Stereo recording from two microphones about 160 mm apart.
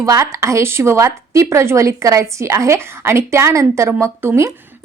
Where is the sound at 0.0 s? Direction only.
20° right (ahead or behind).